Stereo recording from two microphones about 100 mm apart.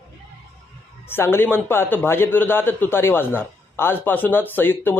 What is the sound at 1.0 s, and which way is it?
A man's voice, 25° left (ahead or behind).